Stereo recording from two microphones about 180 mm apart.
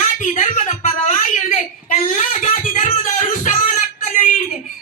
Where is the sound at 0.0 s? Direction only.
45° left (ahead or behind).